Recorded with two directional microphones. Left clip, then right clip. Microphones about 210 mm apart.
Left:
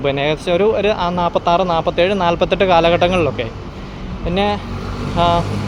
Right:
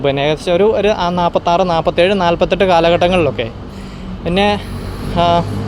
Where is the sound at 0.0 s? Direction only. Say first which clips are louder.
Right 3 dB; 15° right (ahead or behind).